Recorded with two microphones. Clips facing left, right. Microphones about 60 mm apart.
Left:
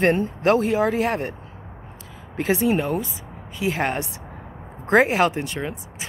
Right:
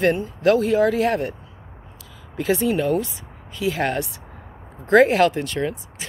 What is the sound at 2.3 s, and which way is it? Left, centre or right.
Speech, left.